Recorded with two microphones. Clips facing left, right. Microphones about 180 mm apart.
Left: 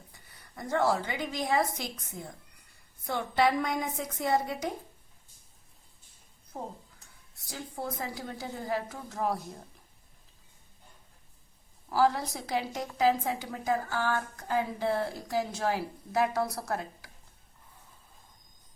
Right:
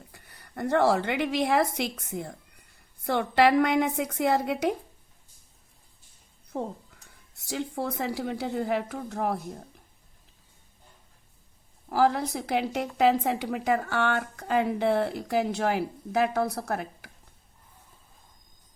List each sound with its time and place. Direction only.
0.1 s a woman's voice: 65° right (ahead or behind)
6.5 s a woman's voice: 70° right (ahead or behind)
11.9 s a woman's voice: 55° right (ahead or behind)